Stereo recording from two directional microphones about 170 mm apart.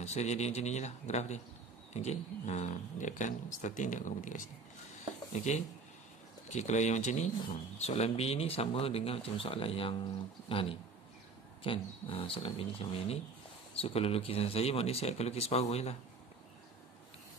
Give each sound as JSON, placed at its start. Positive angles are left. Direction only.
{"t": 0.0, "sound": "speech", "side_deg": 40}